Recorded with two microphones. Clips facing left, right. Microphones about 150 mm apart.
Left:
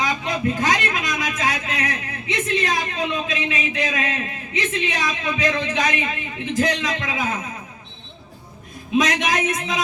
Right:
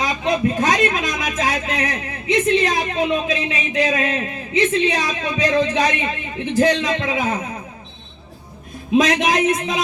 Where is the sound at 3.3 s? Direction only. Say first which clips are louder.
Right 2 dB; 30° right (ahead or behind).